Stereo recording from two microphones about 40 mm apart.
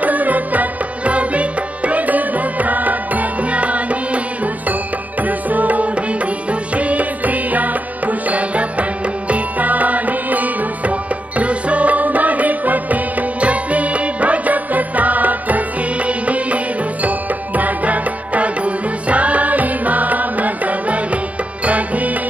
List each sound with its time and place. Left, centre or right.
0.0 s music: right
5.2 s music: right